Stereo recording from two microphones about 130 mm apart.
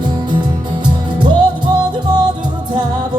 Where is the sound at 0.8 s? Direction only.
35° right (ahead or behind).